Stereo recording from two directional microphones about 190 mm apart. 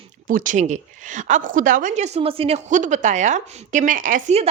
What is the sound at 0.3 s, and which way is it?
A woman's voice, 45° right (ahead or behind).